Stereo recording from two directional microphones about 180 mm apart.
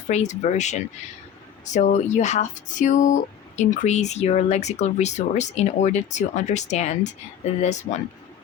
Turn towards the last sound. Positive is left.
turn(degrees=40)  # may be behind; listen again after turning